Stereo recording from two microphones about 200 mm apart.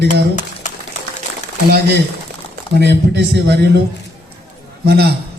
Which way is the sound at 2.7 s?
55° right (ahead or behind).